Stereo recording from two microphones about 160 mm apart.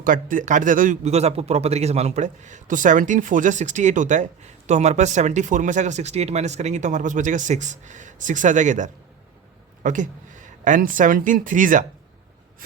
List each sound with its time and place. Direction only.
0.0 s speech: 55° right (ahead or behind)